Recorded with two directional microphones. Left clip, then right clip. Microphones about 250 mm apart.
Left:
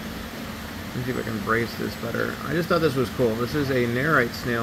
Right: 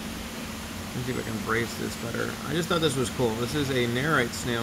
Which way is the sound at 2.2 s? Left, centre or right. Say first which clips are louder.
Left 4 dB; centre.